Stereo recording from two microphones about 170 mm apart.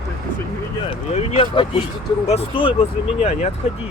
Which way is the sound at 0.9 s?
35° left (ahead or behind).